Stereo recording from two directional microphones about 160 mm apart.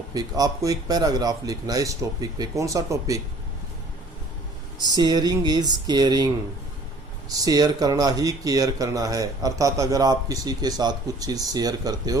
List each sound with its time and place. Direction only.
0.1 s speech: 25° right (ahead or behind)
4.9 s speech: 25° right (ahead or behind)
7.3 s speech: 25° right (ahead or behind)